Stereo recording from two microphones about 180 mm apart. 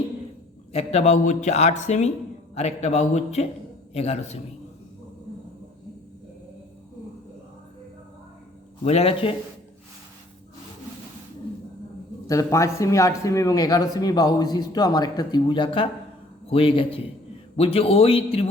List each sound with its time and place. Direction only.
0.7 s speech: 35° left (ahead or behind)
8.8 s speech: 35° left (ahead or behind)
12.3 s speech: 20° left (ahead or behind)